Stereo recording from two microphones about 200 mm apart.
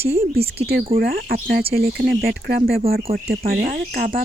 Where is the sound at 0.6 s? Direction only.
50° right (ahead or behind).